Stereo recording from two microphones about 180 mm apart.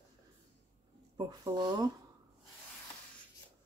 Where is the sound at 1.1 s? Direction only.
20° right (ahead or behind).